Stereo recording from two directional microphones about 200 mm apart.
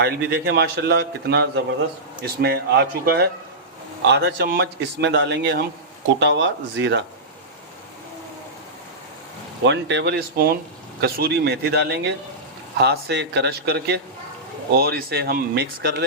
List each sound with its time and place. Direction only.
0.0 s a man's voice: 55° right (ahead or behind)
9.6 s a man's voice: 60° right (ahead or behind)